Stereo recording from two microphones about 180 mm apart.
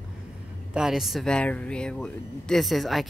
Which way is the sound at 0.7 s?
Centre (ahead or behind).